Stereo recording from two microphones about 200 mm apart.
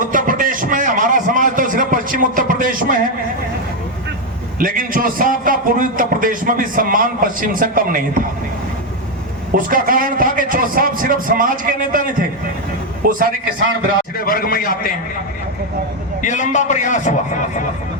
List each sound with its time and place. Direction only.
0.0 s a sound: 40° right (ahead or behind)
4.6 s a man's voice: 45° right (ahead or behind)
9.5 s a man's voice: 45° right (ahead or behind)
13.1 s a man's voice: 45° right (ahead or behind)
14.2 s a man's voice: 45° left (ahead or behind)
16.2 s a man's voice: 35° left (ahead or behind)